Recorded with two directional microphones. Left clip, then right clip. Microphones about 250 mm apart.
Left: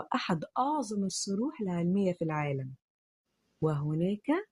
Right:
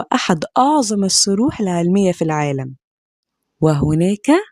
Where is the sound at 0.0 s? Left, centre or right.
Right.